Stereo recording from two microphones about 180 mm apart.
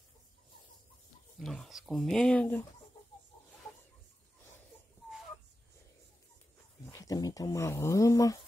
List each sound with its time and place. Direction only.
1.4 s speech: centre (ahead or behind)
6.9 s speech: 20° left (ahead or behind)